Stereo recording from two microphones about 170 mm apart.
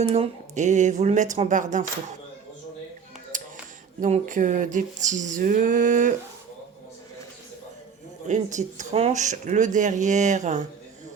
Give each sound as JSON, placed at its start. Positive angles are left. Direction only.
{"t": 0.1, "sound": "speech", "side_deg": -40}
{"t": 3.3, "sound": "a sound", "side_deg": -50}
{"t": 4.0, "sound": "speech", "side_deg": -50}
{"t": 8.3, "sound": "speech", "side_deg": -45}